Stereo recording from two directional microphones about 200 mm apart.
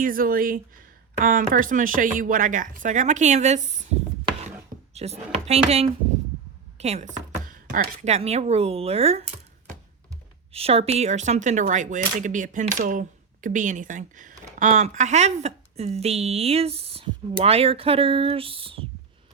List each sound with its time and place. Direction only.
0.0 s speech: 45° right (ahead or behind)
4.9 s speech: 30° right (ahead or behind)